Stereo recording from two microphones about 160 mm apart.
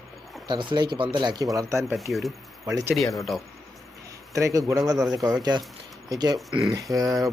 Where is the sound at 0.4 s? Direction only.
30° right (ahead or behind).